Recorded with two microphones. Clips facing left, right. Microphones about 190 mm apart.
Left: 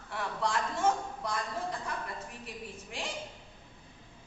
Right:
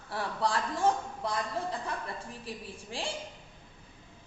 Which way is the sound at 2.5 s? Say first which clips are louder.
Right 2 dB; 30° right (ahead or behind).